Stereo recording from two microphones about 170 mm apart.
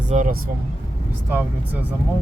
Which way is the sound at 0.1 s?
50° right (ahead or behind).